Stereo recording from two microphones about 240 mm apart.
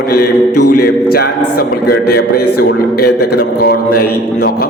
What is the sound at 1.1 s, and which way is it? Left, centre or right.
A man's voice, left.